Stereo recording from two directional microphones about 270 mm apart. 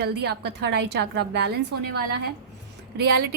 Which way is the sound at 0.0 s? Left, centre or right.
Right.